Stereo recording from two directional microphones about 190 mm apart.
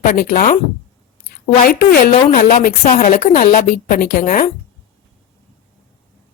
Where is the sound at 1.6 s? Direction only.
50° left (ahead or behind).